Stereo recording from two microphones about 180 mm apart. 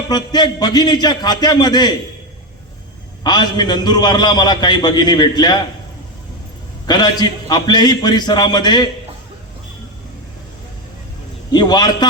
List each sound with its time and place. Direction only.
0.1 s a man's voice: 20° left (ahead or behind)
3.2 s a man's voice: 25° left (ahead or behind)
6.8 s a man's voice: 25° left (ahead or behind)
11.5 s a man's voice: 25° left (ahead or behind)